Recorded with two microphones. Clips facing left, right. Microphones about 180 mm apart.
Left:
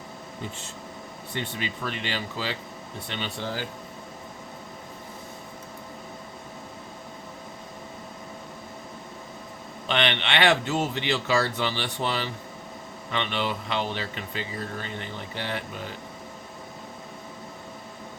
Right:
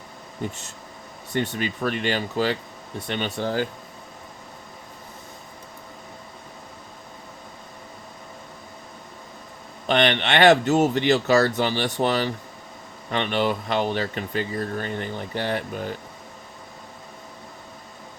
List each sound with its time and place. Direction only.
1.3 s speech: 50° right (ahead or behind)
9.9 s speech: 45° right (ahead or behind)